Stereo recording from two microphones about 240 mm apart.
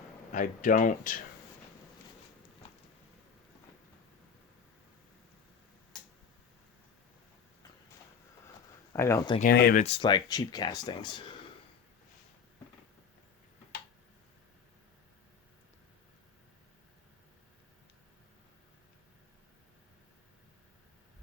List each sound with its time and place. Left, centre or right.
0.3 s speech: left
8.9 s speech: centre
9.4 s speech: left
9.8 s speech: left